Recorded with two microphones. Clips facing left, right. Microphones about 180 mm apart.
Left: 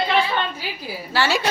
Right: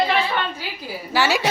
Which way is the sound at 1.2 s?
15° right (ahead or behind).